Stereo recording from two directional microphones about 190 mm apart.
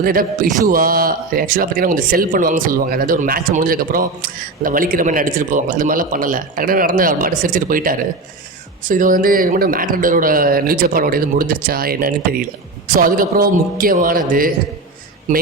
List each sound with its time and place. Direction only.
0.0 s a man's voice: 50° right (ahead or behind)